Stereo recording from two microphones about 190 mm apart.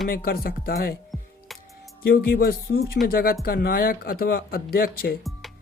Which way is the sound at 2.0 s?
50° left (ahead or behind).